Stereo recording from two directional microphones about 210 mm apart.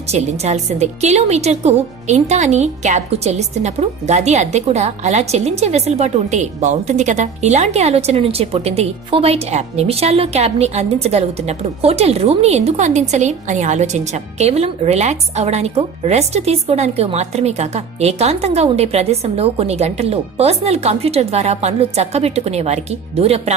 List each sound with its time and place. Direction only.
0.1 s a woman's voice: 30° right (ahead or behind)